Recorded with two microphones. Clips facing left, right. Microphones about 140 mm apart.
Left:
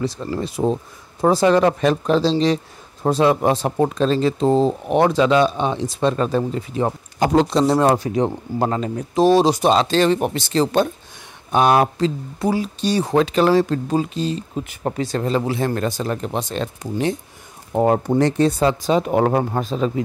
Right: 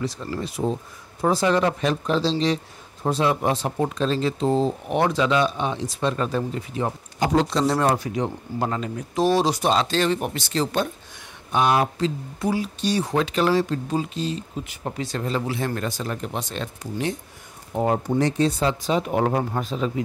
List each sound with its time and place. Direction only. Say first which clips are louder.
0.4 s speech: left 5 dB; 35° left (ahead or behind)
1.6 s speech: left 5 dB; 50° left (ahead or behind)
3.7 s speech: left 6 dB; 55° left (ahead or behind)
4.0 s speech: left 4 dB; 40° left (ahead or behind)
11.5 s speech: left 5 dB; 50° left (ahead or behind)
12.0 s speech: left 4 dB; 35° left (ahead or behind); by 15.0 s 55° left (ahead or behind)
15.0 s speech: left 5 dB; 35° left (ahead or behind)
17.7 s speech: left 5 dB; 60° left (ahead or behind); by 19.2 s 35° left (ahead or behind)
19.2 s speech: left 4 dB; 50° left (ahead or behind)
19.6 s speech: left 5 dB; 40° left (ahead or behind)